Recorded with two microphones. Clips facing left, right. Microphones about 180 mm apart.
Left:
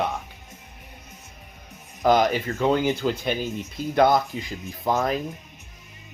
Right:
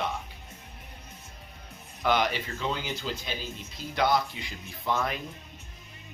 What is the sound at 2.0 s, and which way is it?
Speech, 45° left (ahead or behind).